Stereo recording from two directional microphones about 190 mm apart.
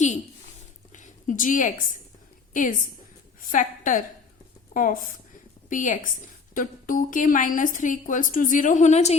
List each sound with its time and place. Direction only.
0.9 s a woman's voice: 45° left (ahead or behind)